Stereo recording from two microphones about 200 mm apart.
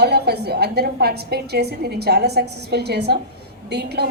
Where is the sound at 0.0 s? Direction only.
55° right (ahead or behind).